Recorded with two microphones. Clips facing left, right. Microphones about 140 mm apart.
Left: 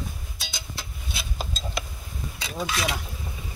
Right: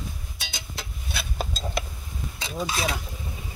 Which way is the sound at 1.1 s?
55° right (ahead or behind).